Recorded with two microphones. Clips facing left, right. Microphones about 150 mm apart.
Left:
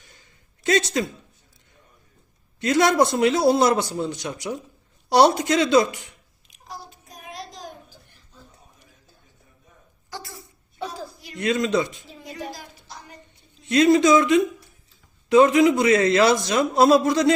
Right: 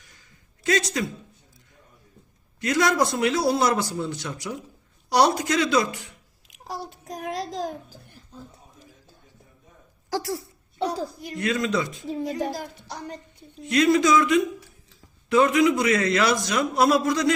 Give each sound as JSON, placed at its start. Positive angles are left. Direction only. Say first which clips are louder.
{"t": 0.6, "sound": "speech", "louder": "left 3 dB", "side_deg": 25}
{"t": 2.6, "sound": "a man's voice", "louder": "left 3 dB", "side_deg": 25}
{"t": 7.1, "sound": "a sound", "louder": "right 9 dB", "side_deg": -90}
{"t": 10.1, "sound": "a sound", "louder": "right 11 dB", "side_deg": -90}
{"t": 11.0, "sound": "a woman's voice", "louder": "right 6 dB", "side_deg": -45}
{"t": 11.3, "sound": "a man's voice", "louder": "left 3 dB", "side_deg": 20}
{"t": 12.2, "sound": "a woman's voice", "louder": "right 6 dB", "side_deg": -40}
{"t": 13.7, "sound": "a man's voice", "louder": "left 3 dB", "side_deg": 25}